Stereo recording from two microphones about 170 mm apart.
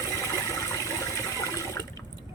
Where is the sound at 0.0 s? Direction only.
20° left (ahead or behind).